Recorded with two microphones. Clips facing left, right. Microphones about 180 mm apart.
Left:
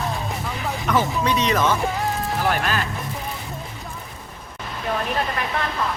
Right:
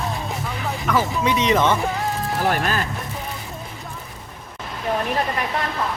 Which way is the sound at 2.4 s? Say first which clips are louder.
Right 2 dB; 45° right (ahead or behind).